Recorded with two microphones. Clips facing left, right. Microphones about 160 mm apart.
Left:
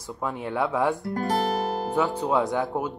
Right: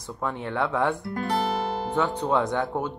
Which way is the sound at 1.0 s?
40° left (ahead or behind).